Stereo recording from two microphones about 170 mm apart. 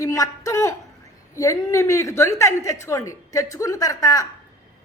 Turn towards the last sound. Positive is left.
turn(degrees=20)  # may be behind; listen again after turning